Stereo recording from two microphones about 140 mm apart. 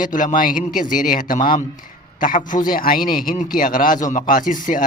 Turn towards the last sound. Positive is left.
turn(degrees=70)  # may be behind; listen again after turning